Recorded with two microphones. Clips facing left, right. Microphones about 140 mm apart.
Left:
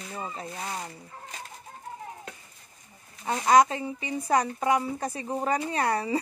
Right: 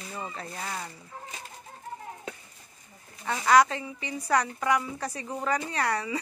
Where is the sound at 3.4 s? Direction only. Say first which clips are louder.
Left 1 dB; 20° left (ahead or behind).